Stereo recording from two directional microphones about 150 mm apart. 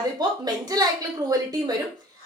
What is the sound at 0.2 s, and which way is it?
Speech, 25° right (ahead or behind).